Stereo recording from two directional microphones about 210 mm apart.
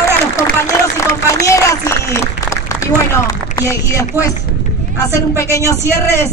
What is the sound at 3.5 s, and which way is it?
Speech, 15° left (ahead or behind).